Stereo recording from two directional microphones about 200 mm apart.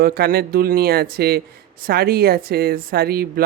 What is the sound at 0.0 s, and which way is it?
Speech, 50° right (ahead or behind).